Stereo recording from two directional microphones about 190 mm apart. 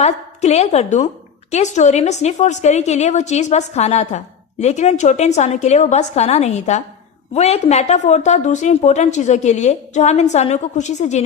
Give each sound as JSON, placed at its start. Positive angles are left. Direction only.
{"t": 0.0, "sound": "a woman's voice", "side_deg": 35}